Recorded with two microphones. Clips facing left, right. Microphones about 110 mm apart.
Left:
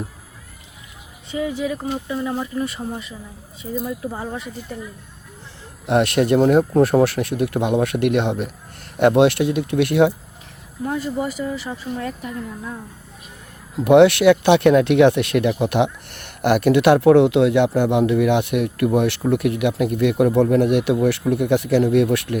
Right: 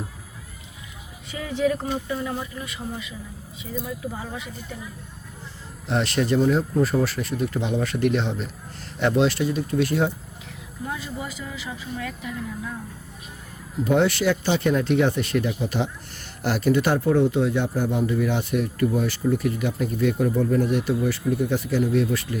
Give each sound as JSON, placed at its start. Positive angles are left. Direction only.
{"t": 1.3, "sound": "speech", "side_deg": 20}
{"t": 1.5, "sound": "speech", "side_deg": 10}
{"t": 2.3, "sound": "speech", "side_deg": 35}
{"t": 5.8, "sound": "speech", "side_deg": 60}
{"t": 10.8, "sound": "speech", "side_deg": 45}
{"t": 11.9, "sound": "speech", "side_deg": 40}
{"t": 13.7, "sound": "speech", "side_deg": 70}